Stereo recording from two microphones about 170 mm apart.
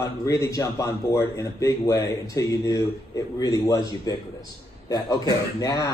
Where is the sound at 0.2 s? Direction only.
20° left (ahead or behind).